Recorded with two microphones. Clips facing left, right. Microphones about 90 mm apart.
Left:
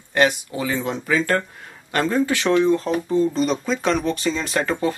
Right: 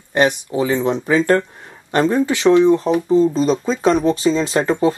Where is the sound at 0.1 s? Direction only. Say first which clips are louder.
Right 3 dB; 20° right (ahead or behind).